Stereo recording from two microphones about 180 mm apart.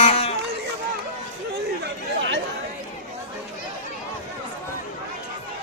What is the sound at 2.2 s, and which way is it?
Chatter, 85° right.